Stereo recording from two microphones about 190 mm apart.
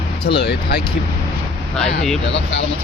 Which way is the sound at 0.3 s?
55° left (ahead or behind).